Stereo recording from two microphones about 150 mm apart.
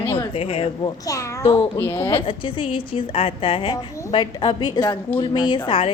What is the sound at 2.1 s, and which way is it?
A woman's voice, 35° left (ahead or behind).